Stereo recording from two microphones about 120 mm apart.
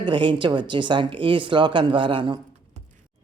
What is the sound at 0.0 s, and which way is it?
Speech, 45° right (ahead or behind).